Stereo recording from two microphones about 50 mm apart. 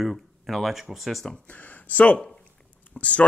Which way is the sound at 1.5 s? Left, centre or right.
Left.